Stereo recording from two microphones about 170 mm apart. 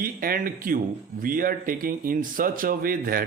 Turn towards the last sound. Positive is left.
turn(degrees=-60)  # may be behind; listen again after turning